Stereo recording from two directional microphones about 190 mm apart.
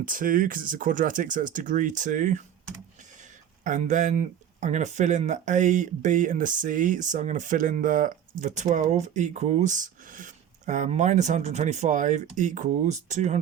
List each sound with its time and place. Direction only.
0.0 s speech: 45° right (ahead or behind)
3.6 s speech: 40° right (ahead or behind)